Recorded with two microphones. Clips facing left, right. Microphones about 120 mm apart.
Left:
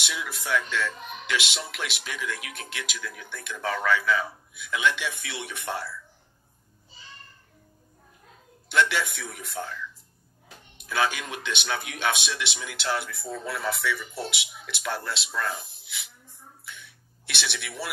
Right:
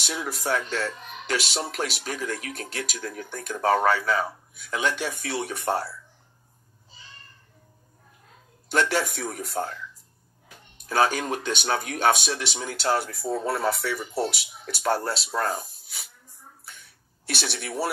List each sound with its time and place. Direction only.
0.0 s speech: 40° right (ahead or behind)
8.6 s speech: 40° right (ahead or behind)
10.8 s speech: 40° right (ahead or behind)
16.6 s a sound: 40° right (ahead or behind)